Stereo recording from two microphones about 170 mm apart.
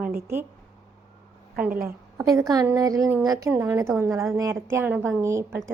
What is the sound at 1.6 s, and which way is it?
Speech, 55° right (ahead or behind).